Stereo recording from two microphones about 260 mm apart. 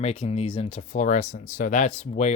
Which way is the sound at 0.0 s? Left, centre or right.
Left.